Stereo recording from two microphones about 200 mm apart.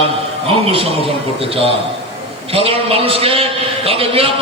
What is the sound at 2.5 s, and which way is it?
A man's voice, 30° right (ahead or behind).